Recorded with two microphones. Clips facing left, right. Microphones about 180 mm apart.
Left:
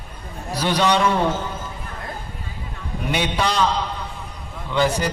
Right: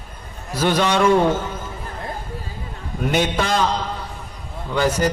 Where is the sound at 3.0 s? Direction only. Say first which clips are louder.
Right 2 dB; 45° right (ahead or behind).